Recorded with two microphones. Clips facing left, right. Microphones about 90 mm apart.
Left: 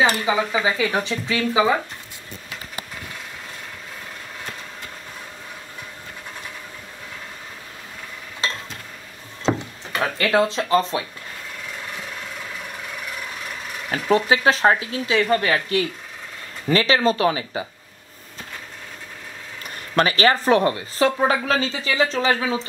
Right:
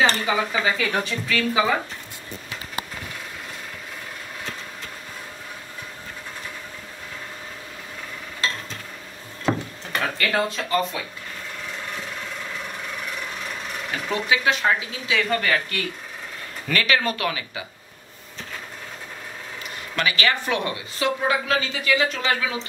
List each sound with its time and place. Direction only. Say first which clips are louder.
0.0 s speech: left 2 dB; 10° left (ahead or behind)
9.4 s a sound: left 2 dB; 20° left (ahead or behind)
10.1 s speech: left 7 dB; 25° left (ahead or behind)
13.9 s a woman's voice: left 6 dB; 35° left (ahead or behind)
20.0 s a woman's voice: left 5 dB; 35° left (ahead or behind)